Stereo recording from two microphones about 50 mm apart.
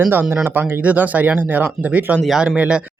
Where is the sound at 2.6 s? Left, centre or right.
Right.